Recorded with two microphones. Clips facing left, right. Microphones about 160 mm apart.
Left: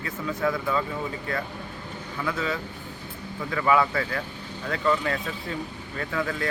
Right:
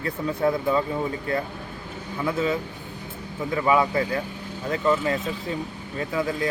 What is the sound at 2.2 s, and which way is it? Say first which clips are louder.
Speech: right 5 dB; 25° right (ahead or behind).